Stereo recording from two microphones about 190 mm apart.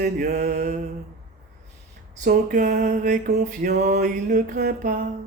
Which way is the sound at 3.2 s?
60° right (ahead or behind).